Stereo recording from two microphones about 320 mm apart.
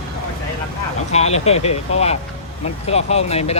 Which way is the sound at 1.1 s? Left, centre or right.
Centre.